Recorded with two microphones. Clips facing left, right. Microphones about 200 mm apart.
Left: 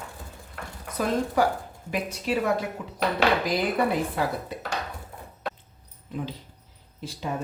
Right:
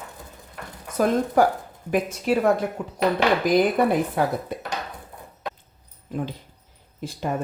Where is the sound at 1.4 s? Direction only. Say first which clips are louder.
Right 4 dB; 50° right (ahead or behind).